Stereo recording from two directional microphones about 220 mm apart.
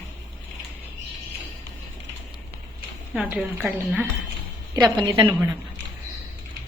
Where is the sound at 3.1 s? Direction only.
5° right (ahead or behind).